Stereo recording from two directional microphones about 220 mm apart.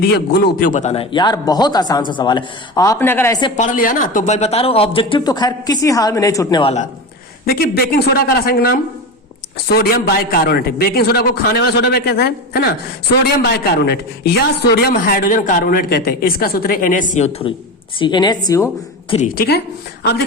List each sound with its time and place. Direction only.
0.0 s a man's voice: 45° left (ahead or behind); by 3.5 s 15° left (ahead or behind)
3.6 s a man's voice: 35° left (ahead or behind)
7.4 s a man's voice: 45° left (ahead or behind)
13.8 s a man's voice: 50° left (ahead or behind); by 18.7 s 15° left (ahead or behind)
19.3 s a man's voice: 45° left (ahead or behind)